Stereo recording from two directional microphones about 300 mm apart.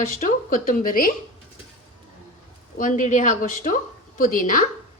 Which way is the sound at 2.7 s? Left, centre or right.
Left.